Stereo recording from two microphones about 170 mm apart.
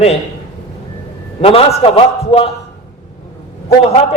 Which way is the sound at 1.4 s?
35° left (ahead or behind).